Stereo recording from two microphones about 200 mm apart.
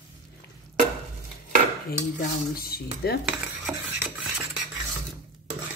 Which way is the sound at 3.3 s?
5° right (ahead or behind).